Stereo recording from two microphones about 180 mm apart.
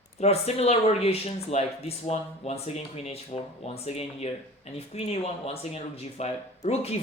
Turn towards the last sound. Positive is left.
turn(degrees=35)  # may be behind; listen again after turning